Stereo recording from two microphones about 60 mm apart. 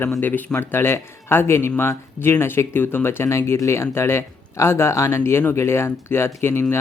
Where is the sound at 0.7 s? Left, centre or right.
Left.